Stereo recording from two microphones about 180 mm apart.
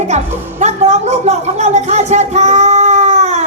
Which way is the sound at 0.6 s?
35° right (ahead or behind).